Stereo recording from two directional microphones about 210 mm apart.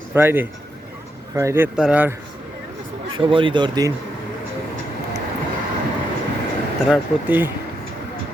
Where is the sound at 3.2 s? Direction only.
25° right (ahead or behind).